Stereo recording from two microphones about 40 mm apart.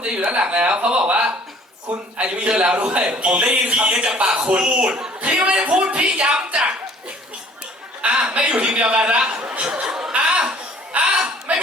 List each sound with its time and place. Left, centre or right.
0.0 s a man's voice: right
4.1 s speech: right
4.4 s a man's voice: right
4.6 s speech: right
8.0 s chuckle: right
8.3 s a man's voice: right
9.8 s chuckle: centre
11.5 s a sound: right